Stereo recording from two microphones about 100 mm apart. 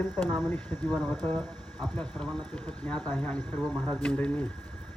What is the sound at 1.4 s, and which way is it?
Speech, 5° left (ahead or behind).